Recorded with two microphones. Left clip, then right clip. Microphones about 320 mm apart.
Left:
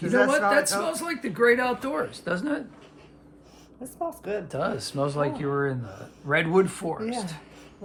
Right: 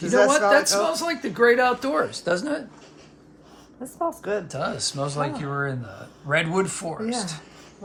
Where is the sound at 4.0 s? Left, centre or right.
Centre.